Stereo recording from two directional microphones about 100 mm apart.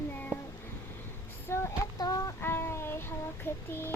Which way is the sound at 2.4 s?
25° left (ahead or behind).